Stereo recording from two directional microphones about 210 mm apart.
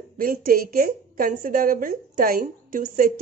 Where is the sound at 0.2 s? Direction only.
45° right (ahead or behind).